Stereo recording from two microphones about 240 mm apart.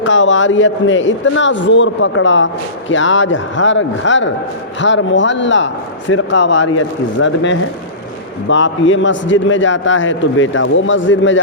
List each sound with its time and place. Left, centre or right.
0.0 s a man's voice: left